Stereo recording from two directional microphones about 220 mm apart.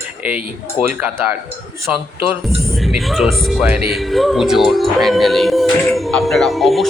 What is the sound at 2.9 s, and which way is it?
Music, centre (ahead or behind).